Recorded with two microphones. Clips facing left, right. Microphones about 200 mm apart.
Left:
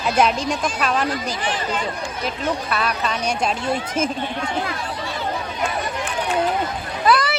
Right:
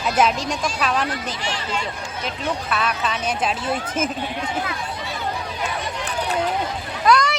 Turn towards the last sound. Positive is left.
turn(degrees=5)  # may be behind; listen again after turning